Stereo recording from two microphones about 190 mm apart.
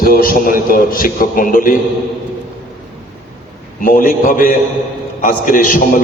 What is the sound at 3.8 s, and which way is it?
A man's voice, 45° left (ahead or behind).